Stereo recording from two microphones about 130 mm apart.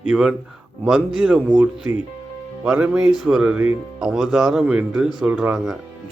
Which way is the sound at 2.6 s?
5° right (ahead or behind).